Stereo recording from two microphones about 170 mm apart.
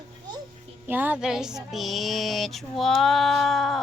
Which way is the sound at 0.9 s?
10° right (ahead or behind).